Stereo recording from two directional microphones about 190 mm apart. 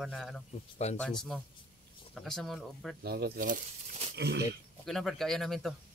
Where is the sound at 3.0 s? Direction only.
55° right (ahead or behind).